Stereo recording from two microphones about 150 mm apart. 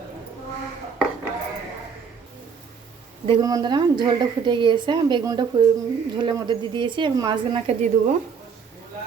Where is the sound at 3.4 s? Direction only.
25° right (ahead or behind).